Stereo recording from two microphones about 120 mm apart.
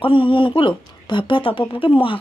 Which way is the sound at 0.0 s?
45° left (ahead or behind).